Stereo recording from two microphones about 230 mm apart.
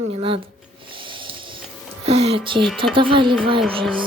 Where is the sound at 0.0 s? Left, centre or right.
Right.